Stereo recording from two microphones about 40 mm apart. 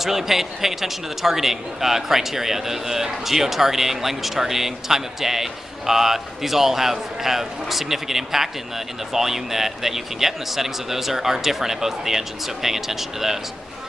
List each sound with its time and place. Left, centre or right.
0.0 s a man's voice: centre